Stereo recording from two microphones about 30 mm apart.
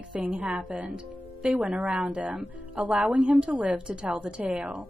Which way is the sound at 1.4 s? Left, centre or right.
Right.